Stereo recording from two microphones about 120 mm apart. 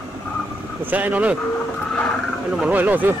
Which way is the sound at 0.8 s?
15° right (ahead or behind).